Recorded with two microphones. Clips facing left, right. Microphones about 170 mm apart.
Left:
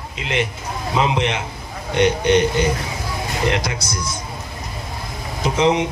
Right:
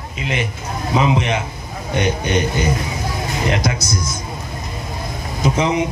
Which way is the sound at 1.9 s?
70° left (ahead or behind).